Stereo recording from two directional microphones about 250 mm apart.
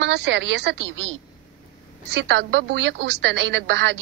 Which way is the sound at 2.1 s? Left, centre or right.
Right.